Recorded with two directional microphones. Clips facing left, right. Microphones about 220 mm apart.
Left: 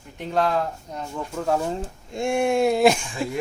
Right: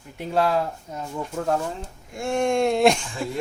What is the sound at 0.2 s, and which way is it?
Speech, 5° right (ahead or behind).